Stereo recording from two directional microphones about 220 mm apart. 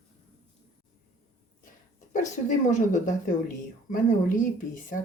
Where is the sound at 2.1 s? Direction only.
35° left (ahead or behind).